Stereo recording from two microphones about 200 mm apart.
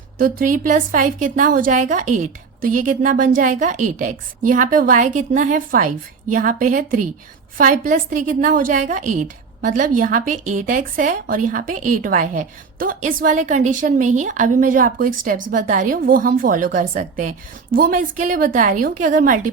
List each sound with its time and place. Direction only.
0.2 s a woman's voice: 45° right (ahead or behind)